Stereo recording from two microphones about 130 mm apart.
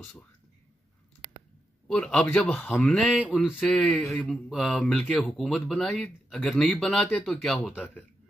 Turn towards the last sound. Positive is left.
turn(degrees=0)  # may be behind; listen again after turning